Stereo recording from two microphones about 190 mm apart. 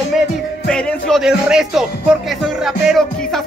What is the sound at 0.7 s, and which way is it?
Music, centre (ahead or behind).